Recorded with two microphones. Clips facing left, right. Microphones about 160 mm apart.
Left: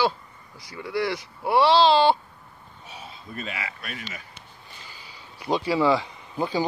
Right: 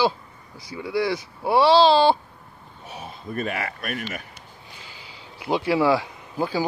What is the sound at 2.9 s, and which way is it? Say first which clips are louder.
Speech: right 7 dB; 50° right (ahead or behind).